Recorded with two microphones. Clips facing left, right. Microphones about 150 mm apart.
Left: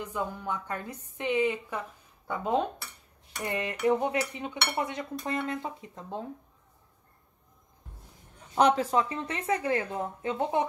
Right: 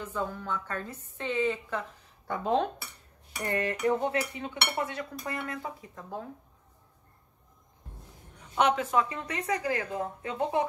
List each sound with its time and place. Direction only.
0.0 s a woman's voice: 15° left (ahead or behind)
8.5 s a woman's voice: 35° left (ahead or behind)